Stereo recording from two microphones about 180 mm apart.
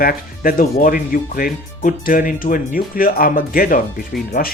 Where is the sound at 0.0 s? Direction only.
55° left (ahead or behind).